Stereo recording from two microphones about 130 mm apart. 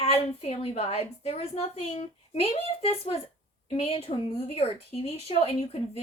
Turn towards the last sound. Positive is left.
turn(degrees=50)  # may be behind; listen again after turning